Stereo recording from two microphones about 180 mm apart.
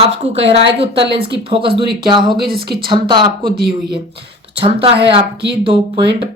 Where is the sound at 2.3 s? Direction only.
60° right (ahead or behind).